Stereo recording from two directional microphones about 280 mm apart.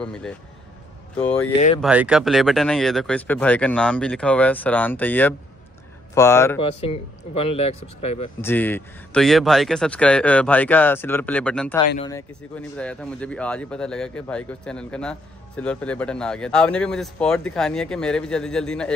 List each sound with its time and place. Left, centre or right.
0.0 s speech: centre
6.7 s speech: left
8.4 s speech: centre